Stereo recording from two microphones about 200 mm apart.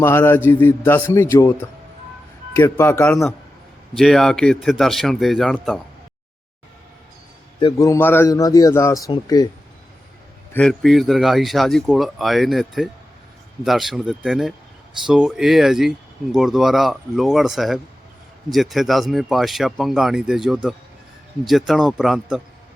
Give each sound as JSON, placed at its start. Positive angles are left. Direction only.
{"t": 0.0, "sound": "a man's voice", "side_deg": 10}
{"t": 2.6, "sound": "a man's voice", "side_deg": 10}
{"t": 3.9, "sound": "speech", "side_deg": 0}
{"t": 7.6, "sound": "a man's voice", "side_deg": 15}
{"t": 10.5, "sound": "speech", "side_deg": 5}